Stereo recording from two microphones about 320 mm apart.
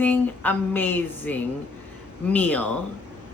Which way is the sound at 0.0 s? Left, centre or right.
Centre.